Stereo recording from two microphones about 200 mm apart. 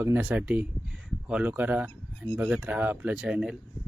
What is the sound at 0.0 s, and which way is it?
Speech, 10° right (ahead or behind).